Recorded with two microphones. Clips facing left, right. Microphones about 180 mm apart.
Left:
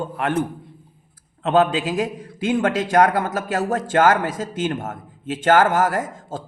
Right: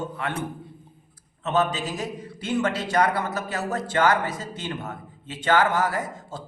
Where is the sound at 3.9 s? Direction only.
50° left (ahead or behind).